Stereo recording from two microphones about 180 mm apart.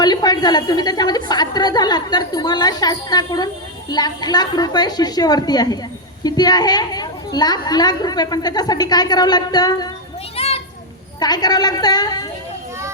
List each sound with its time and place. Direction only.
0.0 s a woman's voice: 20° left (ahead or behind)
10.3 s children playing: 35° left (ahead or behind)
11.2 s a woman's voice: 20° left (ahead or behind)